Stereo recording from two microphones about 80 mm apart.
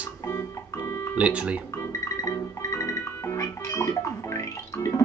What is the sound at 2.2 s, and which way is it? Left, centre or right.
Music, left.